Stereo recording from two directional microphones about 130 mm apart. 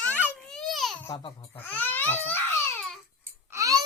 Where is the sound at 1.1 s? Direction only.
35° left (ahead or behind).